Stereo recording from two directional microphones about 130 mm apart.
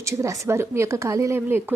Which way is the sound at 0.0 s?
20° right (ahead or behind).